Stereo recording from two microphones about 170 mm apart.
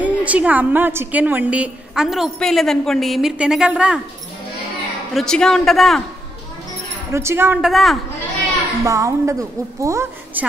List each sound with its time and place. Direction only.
0.0 s a woman's voice: 10° right (ahead or behind)
5.1 s a woman's voice: 5° left (ahead or behind)
7.1 s a woman's voice: 15° right (ahead or behind); by 8.0 s centre (ahead or behind)
8.8 s a woman's voice: 20° right (ahead or behind)